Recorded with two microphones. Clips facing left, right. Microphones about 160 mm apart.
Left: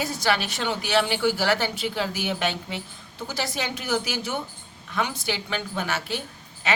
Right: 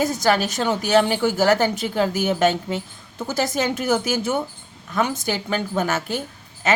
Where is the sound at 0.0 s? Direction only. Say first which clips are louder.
Right 6 dB; 45° right (ahead or behind).